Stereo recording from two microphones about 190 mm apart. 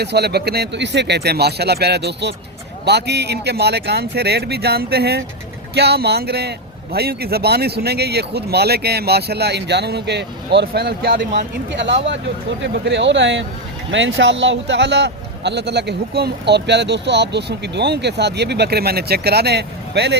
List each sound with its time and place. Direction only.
0.0 s a man's voice: 60° right (ahead or behind)